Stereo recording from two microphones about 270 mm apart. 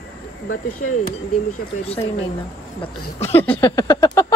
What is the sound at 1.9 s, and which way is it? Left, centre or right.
Speech, left.